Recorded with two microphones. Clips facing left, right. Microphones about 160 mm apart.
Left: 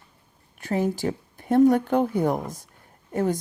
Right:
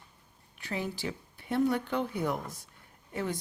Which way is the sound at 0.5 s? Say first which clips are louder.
Left 11 dB; 45° left (ahead or behind).